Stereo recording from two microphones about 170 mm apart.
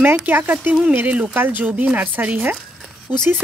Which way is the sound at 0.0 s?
10° right (ahead or behind).